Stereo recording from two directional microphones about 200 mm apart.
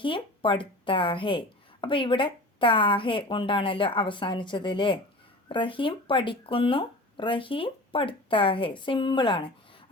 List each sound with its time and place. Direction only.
0.0 s speech: 25° left (ahead or behind)